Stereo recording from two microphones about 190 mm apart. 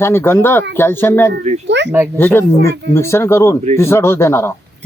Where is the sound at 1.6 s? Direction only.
65° right (ahead or behind).